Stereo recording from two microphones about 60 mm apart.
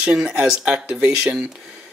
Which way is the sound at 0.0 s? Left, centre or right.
Centre.